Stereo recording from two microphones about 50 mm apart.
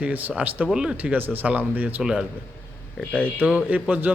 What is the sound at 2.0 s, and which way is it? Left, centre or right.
Speech, centre.